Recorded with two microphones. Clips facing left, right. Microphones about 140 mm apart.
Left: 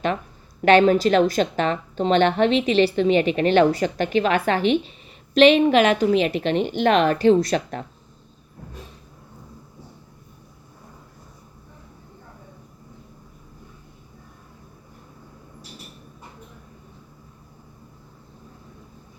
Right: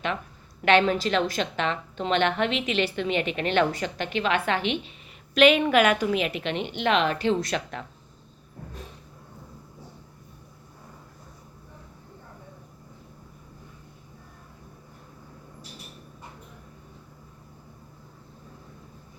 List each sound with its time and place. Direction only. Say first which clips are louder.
0.6 s a woman's voice: left 6 dB; 40° left (ahead or behind)